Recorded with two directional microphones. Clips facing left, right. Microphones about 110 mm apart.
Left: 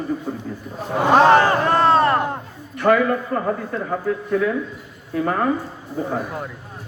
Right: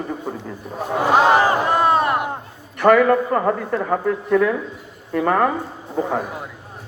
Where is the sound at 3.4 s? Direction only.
75° right (ahead or behind).